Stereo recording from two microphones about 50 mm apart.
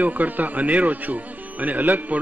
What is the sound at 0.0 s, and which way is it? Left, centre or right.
Speech, right.